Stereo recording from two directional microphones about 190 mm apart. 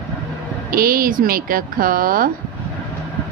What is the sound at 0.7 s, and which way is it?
A woman's voice, 50° right (ahead or behind).